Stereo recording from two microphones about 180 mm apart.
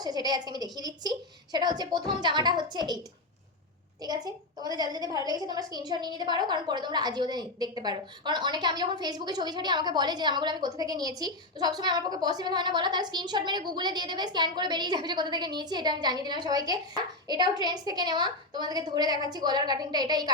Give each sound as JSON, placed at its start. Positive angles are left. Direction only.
{"t": 0.0, "sound": "a woman's voice", "side_deg": -20}
{"t": 4.0, "sound": "a woman's voice", "side_deg": -20}